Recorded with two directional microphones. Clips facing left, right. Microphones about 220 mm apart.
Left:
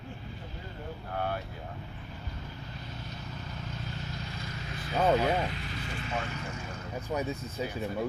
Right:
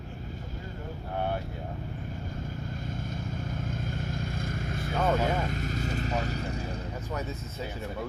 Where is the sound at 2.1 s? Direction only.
50° right (ahead or behind).